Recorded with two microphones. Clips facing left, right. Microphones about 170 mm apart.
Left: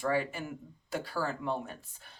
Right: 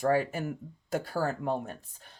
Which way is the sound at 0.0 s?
45° right (ahead or behind).